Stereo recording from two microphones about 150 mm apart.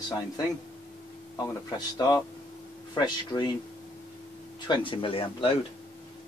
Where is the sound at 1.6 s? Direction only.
25° left (ahead or behind).